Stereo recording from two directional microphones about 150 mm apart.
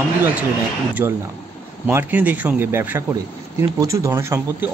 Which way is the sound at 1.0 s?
20° right (ahead or behind).